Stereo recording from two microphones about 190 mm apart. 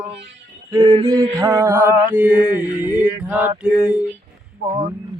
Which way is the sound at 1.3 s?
15° right (ahead or behind).